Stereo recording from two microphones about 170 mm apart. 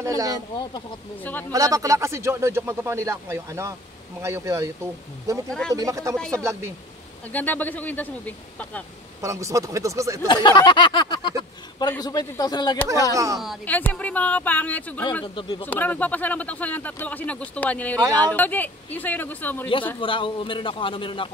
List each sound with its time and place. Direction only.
0.0 s speech: 20° right (ahead or behind)
1.5 s speech: 20° right (ahead or behind)
5.5 s speech: 5° left (ahead or behind)
5.8 s speech: 20° right (ahead or behind)
6.1 s speech: 5° left (ahead or behind)
9.2 s speech: 20° right (ahead or behind)
10.2 s a sound: 25° left (ahead or behind)
13.1 s speech: 20° right (ahead or behind)
13.7 s speech: 10° left (ahead or behind)
15.2 s a sound: 30° left (ahead or behind)
15.6 s speech: 10° left (ahead or behind)
20.0 s a man's voice: 30° left (ahead or behind)